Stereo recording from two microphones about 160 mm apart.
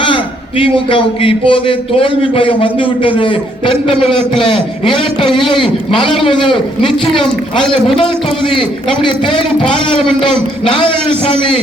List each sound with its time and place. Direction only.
0.0 s a man's voice: 35° left (ahead or behind)
7.6 s a man's voice: 5° left (ahead or behind)
9.0 s a man's voice: 35° left (ahead or behind)
10.7 s a man's voice: 35° left (ahead or behind)